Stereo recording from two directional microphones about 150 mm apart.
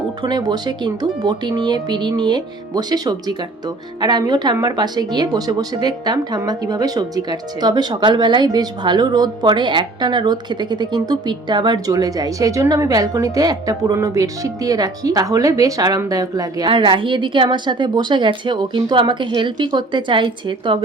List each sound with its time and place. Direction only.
0.2 s speech: 30° right (ahead or behind)